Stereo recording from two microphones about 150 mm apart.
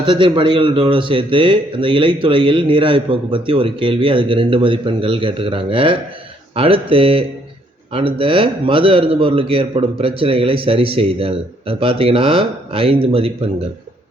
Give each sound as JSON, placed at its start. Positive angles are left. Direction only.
{"t": 0.0, "sound": "a man's voice", "side_deg": -30}